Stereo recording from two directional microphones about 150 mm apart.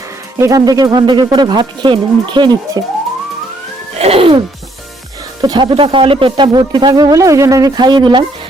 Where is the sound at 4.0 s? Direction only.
40° right (ahead or behind).